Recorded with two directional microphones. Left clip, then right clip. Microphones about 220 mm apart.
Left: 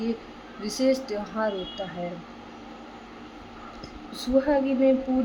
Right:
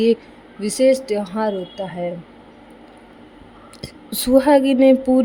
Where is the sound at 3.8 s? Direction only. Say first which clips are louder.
Right 11 dB; 45° right (ahead or behind).